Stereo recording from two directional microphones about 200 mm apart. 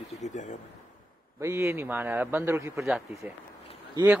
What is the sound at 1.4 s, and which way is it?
A man's voice, 15° right (ahead or behind).